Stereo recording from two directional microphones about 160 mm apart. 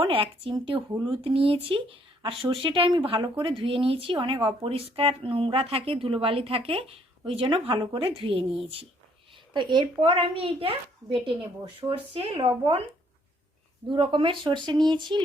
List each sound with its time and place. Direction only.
0.0 s a woman's voice: 35° right (ahead or behind)
9.5 s a woman's voice: 30° right (ahead or behind)
13.8 s speech: 30° right (ahead or behind)